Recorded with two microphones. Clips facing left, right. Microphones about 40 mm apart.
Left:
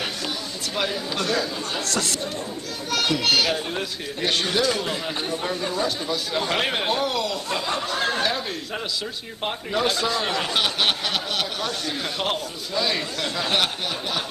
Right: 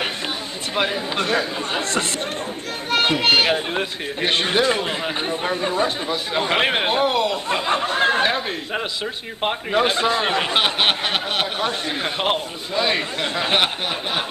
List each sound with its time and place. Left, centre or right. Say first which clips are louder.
0.7 s speech: right 4 dB; right